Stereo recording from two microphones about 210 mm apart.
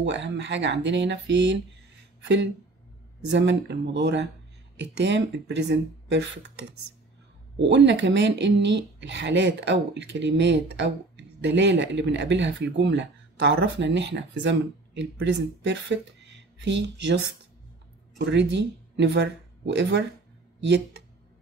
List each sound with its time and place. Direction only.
0.0 s speech: 55° right (ahead or behind)
7.5 s speech: 60° right (ahead or behind)